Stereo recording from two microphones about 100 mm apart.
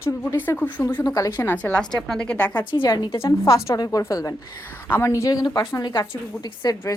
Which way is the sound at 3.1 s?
25° left (ahead or behind).